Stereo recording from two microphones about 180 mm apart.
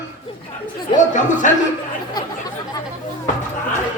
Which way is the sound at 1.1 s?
45° left (ahead or behind).